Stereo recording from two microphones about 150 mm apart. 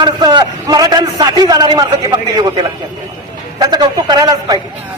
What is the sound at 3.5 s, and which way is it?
A man's voice, 30° right (ahead or behind).